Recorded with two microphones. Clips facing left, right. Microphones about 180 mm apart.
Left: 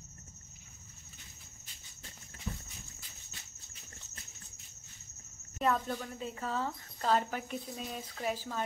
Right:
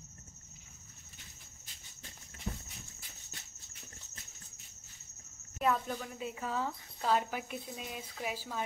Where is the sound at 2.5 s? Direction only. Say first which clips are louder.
Even; 40° right (ahead or behind).